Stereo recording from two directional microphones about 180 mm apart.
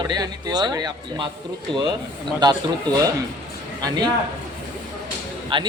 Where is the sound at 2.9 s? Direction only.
20° right (ahead or behind).